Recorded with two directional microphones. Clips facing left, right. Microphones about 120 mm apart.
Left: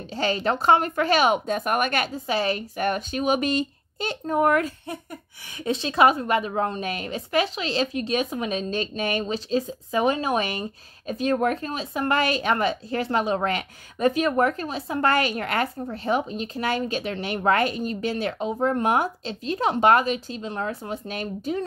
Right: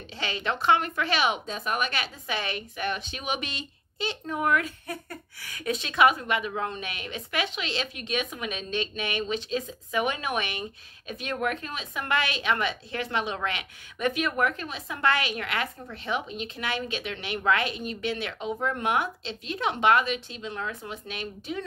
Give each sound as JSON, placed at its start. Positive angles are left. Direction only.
{"t": 0.1, "sound": "speech", "side_deg": 40}
{"t": 5.5, "sound": "a woman's voice", "side_deg": 30}